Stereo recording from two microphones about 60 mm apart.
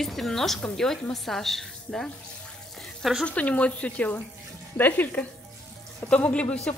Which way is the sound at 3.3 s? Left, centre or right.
Left.